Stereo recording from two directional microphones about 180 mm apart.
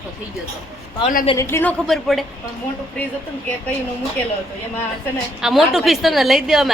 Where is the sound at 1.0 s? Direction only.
50° left (ahead or behind).